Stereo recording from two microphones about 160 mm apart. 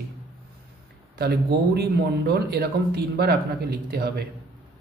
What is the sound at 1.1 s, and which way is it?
Speech, 85° right.